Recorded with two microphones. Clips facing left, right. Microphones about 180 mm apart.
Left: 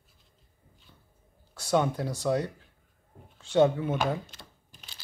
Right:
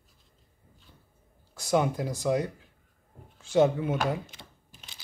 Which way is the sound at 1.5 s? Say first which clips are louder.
Even; 10° right (ahead or behind).